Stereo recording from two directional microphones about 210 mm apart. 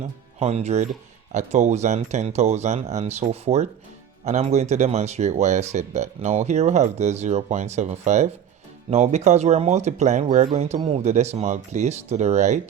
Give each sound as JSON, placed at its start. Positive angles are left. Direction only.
{"t": 0.3, "sound": "speech", "side_deg": -30}